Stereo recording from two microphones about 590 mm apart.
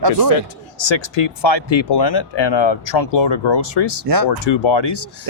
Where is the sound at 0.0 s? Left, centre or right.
Right.